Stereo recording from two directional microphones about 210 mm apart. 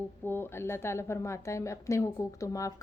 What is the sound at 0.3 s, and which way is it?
A woman's voice, 10° left (ahead or behind).